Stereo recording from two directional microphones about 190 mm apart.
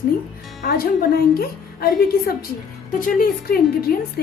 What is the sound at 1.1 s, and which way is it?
A woman's voice, 50° left (ahead or behind).